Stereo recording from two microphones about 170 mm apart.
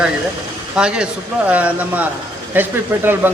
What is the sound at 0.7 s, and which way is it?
A man's voice, 5° right (ahead or behind).